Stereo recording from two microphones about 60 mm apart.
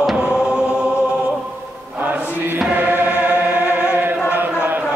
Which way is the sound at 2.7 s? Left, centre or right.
Right.